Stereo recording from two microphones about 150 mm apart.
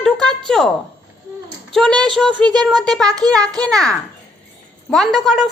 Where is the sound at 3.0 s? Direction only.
25° right (ahead or behind).